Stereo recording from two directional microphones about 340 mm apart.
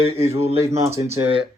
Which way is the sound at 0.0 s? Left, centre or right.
Centre.